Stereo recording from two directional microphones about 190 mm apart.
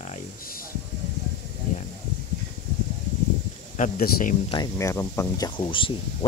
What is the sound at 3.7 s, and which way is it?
Speech, 45° left (ahead or behind).